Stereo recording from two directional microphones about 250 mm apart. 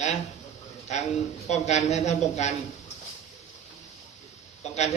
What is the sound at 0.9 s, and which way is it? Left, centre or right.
A man's voice, left.